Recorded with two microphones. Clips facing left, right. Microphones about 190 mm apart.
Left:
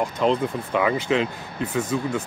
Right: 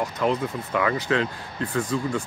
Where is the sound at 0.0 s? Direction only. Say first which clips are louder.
Left 3 dB; 25° left (ahead or behind).